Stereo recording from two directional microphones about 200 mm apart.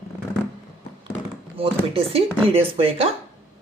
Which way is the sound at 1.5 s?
30° right (ahead or behind).